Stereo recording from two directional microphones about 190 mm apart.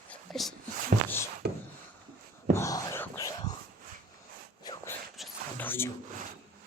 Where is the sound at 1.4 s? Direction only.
60° right (ahead or behind).